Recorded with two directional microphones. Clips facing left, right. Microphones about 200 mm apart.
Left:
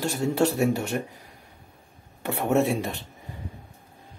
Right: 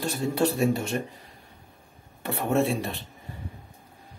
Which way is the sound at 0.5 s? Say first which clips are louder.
Left 1 dB; 70° left (ahead or behind).